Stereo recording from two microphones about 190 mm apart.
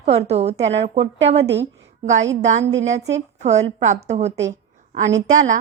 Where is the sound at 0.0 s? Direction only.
35° right (ahead or behind).